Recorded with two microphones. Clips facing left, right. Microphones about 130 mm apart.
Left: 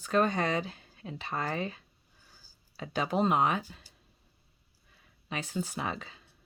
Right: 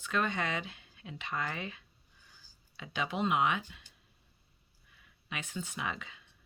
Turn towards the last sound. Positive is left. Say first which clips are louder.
# left 3 dB
turn(degrees=35)  # may be behind; listen again after turning